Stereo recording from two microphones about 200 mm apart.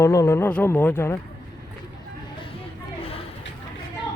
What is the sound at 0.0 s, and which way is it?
Speech, 15° left (ahead or behind).